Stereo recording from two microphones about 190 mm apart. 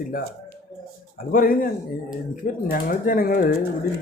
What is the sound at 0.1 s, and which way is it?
Speech, 50° left (ahead or behind).